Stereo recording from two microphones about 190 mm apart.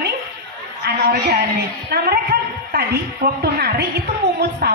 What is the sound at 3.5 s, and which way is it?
A woman's voice, 55° right (ahead or behind).